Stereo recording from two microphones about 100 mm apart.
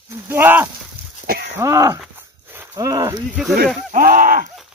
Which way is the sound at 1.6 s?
30° right (ahead or behind).